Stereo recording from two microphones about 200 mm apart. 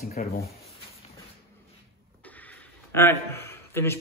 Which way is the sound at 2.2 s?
10° left (ahead or behind).